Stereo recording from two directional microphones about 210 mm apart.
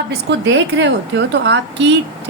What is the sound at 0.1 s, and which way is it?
A woman's voice, 55° right (ahead or behind).